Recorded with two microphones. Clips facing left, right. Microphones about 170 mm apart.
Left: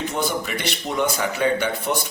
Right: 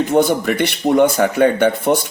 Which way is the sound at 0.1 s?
55° right (ahead or behind).